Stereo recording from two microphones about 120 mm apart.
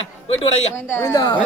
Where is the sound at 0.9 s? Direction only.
30° left (ahead or behind).